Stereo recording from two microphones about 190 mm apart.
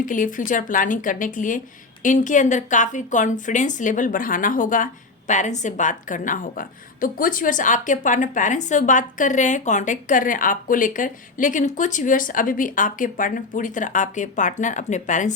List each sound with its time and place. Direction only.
0.0 s a woman's voice: 45° left (ahead or behind)